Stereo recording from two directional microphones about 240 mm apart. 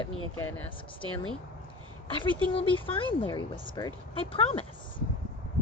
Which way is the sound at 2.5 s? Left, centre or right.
Left.